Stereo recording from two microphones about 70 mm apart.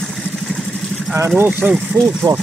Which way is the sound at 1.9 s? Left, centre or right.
Right.